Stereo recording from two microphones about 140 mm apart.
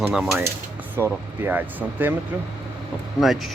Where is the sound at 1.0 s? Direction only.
20° right (ahead or behind).